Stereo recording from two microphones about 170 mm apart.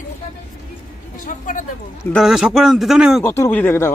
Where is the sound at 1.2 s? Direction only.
50° left (ahead or behind).